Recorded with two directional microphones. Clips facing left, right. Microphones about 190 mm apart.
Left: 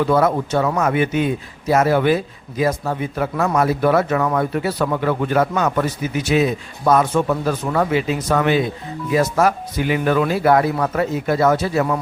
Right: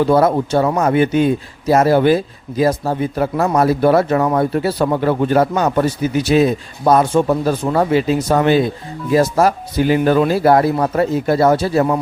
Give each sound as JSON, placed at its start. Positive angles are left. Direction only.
{"t": 0.0, "sound": "speech", "side_deg": -30}